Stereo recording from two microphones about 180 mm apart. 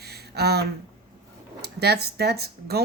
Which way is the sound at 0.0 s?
65° right (ahead or behind).